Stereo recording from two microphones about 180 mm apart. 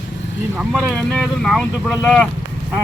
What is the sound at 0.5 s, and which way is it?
Speech, centre (ahead or behind).